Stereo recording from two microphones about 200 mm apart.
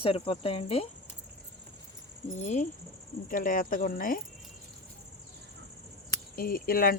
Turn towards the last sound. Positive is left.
turn(degrees=45)  # may be behind; listen again after turning